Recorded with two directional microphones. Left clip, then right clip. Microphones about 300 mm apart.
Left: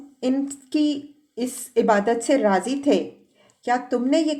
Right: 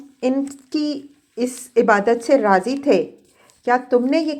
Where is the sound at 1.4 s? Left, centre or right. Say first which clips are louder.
Right 4 dB; centre.